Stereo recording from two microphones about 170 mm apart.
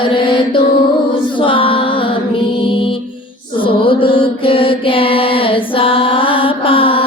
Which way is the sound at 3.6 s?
30° left (ahead or behind).